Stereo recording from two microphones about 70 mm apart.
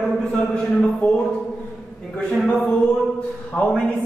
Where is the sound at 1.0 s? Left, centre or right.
Centre.